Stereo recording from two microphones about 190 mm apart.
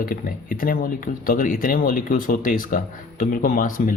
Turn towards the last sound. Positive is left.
turn(degrees=45)  # may be behind; listen again after turning